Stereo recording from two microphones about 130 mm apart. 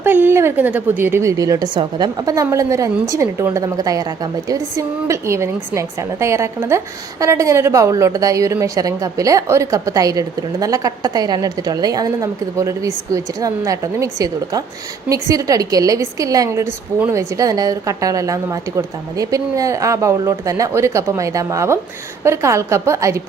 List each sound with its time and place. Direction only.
0.0 s a woman's voice: 15° right (ahead or behind); by 2.0 s 35° right (ahead or behind)
2.2 s a woman's voice: 25° right (ahead or behind)